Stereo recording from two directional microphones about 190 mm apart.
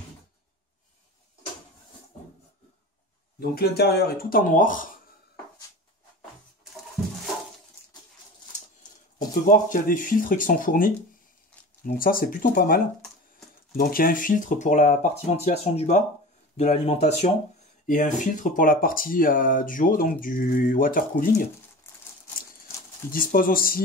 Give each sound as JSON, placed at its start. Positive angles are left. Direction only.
{"t": 3.3, "sound": "speech", "side_deg": 55}
{"t": 9.3, "sound": "speech", "side_deg": 45}
{"t": 17.8, "sound": "speech", "side_deg": 45}
{"t": 21.8, "sound": "a sound", "side_deg": 10}
{"t": 23.1, "sound": "speech", "side_deg": 50}